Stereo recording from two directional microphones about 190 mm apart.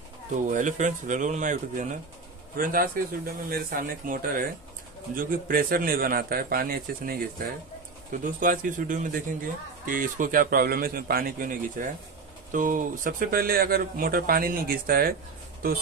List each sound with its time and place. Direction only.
0.5 s speech: 40° right (ahead or behind)